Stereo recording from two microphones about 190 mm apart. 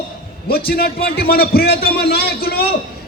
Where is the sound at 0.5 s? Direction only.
55° left (ahead or behind).